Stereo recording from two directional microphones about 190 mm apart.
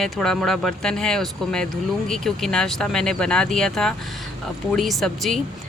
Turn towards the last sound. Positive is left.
turn(degrees=0)  # may be behind; listen again after turning